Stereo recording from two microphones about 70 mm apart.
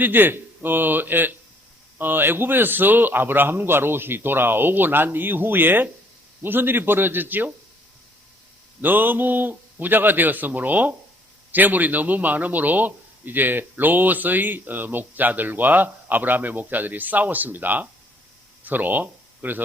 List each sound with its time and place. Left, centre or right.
0.0 s a man's voice: right
8.8 s a man's voice: right